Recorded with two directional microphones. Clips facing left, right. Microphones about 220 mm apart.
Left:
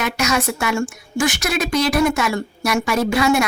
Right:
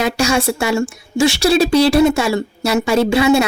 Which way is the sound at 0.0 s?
30° right (ahead or behind).